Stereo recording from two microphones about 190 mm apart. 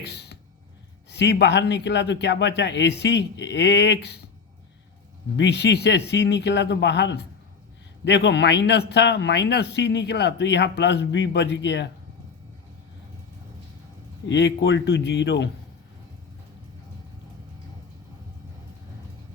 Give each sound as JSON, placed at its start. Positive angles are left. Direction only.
{"t": 0.1, "sound": "a sound", "side_deg": 60}
{"t": 1.1, "sound": "a man's voice", "side_deg": 60}
{"t": 5.4, "sound": "a man's voice", "side_deg": 65}
{"t": 14.3, "sound": "speech", "side_deg": 70}